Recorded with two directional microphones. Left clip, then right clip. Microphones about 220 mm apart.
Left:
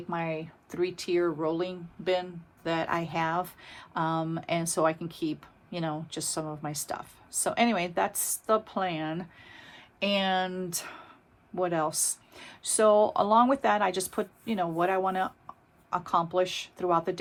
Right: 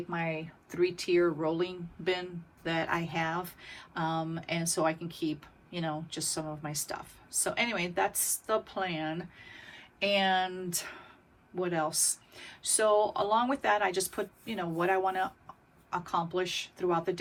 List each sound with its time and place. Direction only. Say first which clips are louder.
0.1 s speech: left 4 dB; 15° left (ahead or behind)